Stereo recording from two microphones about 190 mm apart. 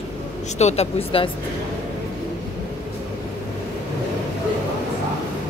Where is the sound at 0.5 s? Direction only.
35° left (ahead or behind).